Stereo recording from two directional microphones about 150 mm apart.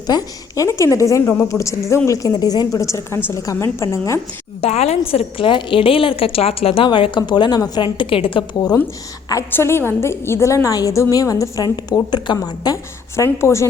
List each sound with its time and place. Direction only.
0.1 s a woman's voice: 25° left (ahead or behind)
4.6 s a woman's voice: 45° left (ahead or behind); by 8.8 s 25° left (ahead or behind)
9.3 s a woman's voice: 15° left (ahead or behind)